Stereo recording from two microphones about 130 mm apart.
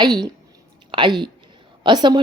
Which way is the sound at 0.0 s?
35° right (ahead or behind).